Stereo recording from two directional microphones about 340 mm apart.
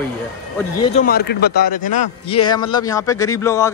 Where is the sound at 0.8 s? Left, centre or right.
Left.